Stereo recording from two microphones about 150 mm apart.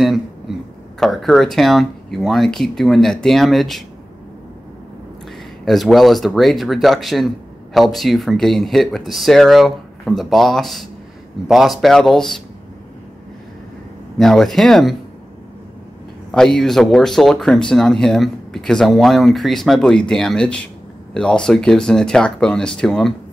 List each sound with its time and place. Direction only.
0.0 s speech: centre (ahead or behind)
5.7 s speech: centre (ahead or behind)
14.1 s speech: centre (ahead or behind)
16.3 s speech: 5° left (ahead or behind)